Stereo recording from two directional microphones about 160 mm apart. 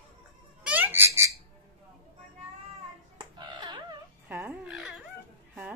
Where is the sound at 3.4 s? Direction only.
30° right (ahead or behind).